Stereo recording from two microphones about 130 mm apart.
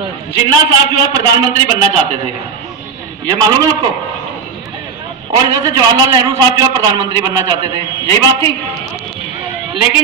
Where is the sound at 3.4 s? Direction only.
30° right (ahead or behind).